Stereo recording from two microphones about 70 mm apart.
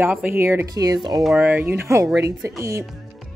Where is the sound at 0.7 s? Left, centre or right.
Right.